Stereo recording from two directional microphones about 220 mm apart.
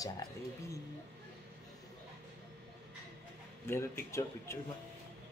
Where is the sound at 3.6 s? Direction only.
10° left (ahead or behind).